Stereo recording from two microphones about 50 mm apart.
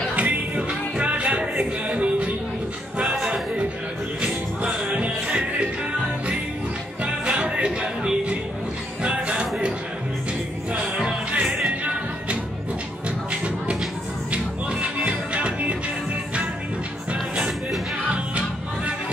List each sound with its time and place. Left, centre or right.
0.1 s music: right
3.0 s a sound: centre
4.2 s music: right
7.1 s music: right
9.0 s a sound: right
10.7 s music: right
14.3 s music: right
18.0 s music: right